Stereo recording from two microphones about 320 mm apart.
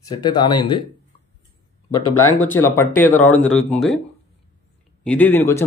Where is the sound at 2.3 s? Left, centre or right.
Centre.